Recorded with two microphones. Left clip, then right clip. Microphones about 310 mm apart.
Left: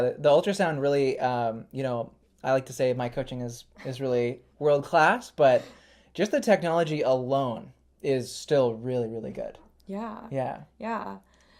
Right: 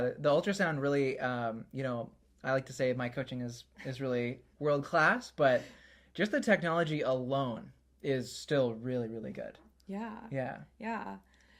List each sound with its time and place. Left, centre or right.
0.0 s speech: left